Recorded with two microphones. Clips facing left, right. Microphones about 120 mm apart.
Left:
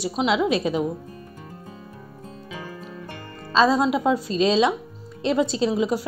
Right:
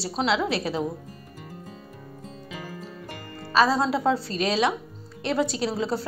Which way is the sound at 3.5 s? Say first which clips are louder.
Left 2 dB; 20° left (ahead or behind).